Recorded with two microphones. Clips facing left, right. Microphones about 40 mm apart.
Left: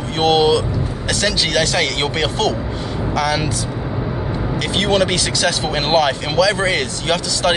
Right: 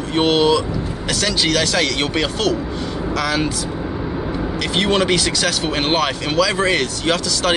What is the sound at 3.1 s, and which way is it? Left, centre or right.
Speech, centre.